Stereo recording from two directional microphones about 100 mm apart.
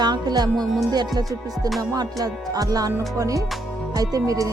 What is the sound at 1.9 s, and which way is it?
Music, 35° right (ahead or behind).